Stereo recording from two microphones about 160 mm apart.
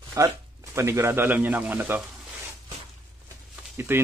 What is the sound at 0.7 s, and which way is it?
Speech, 15° right (ahead or behind).